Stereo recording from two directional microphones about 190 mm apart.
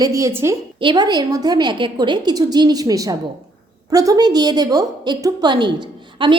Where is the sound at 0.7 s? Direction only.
25° right (ahead or behind).